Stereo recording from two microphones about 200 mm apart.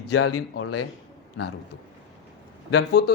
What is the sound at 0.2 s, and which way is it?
Speech, 90° left.